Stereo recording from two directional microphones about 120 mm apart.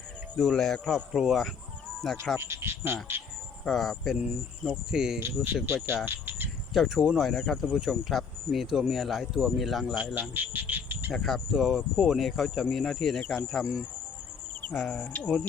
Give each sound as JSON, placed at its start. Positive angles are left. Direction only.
{"t": 0.3, "sound": "speech", "side_deg": 0}
{"t": 2.4, "sound": "speech", "side_deg": -20}
{"t": 3.6, "sound": "speech", "side_deg": 0}
{"t": 5.6, "sound": "speech", "side_deg": -20}
{"t": 6.7, "sound": "speech", "side_deg": -5}
{"t": 10.2, "sound": "a sound", "side_deg": -15}
{"t": 11.1, "sound": "speech", "side_deg": 0}